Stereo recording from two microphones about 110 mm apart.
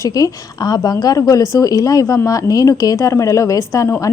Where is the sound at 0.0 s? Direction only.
35° left (ahead or behind).